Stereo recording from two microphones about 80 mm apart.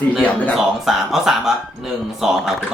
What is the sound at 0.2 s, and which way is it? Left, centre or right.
Speech, centre.